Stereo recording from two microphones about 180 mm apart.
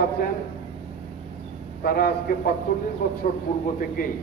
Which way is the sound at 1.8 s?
55° left (ahead or behind).